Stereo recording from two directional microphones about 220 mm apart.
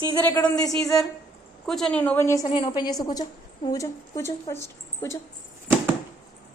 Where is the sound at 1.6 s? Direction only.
Centre (ahead or behind).